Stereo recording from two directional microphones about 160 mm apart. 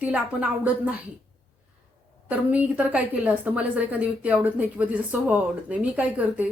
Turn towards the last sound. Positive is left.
turn(degrees=-10)  # may be behind; listen again after turning